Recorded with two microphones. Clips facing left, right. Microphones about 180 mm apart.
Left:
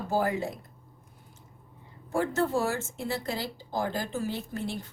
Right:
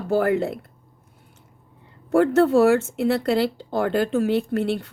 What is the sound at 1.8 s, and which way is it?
Speech, 65° right (ahead or behind).